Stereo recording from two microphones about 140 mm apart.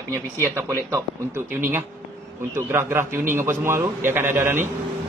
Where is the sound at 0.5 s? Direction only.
20° right (ahead or behind).